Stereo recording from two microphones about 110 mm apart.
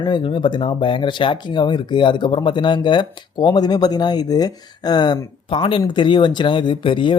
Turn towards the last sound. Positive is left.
turn(degrees=50)  # may be behind; listen again after turning